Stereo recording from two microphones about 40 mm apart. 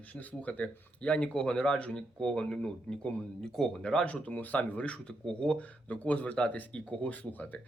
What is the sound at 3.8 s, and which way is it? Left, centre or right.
Speech, left.